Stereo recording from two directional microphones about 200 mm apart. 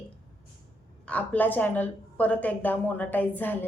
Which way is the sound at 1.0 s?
5° left (ahead or behind).